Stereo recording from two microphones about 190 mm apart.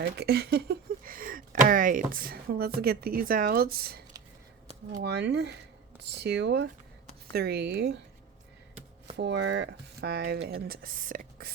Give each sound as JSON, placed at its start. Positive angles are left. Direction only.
{"t": 0.0, "sound": "speech", "side_deg": -55}
{"t": 9.1, "sound": "speech", "side_deg": -70}